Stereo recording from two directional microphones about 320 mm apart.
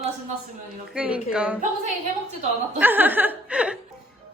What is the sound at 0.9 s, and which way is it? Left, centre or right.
Speech, centre.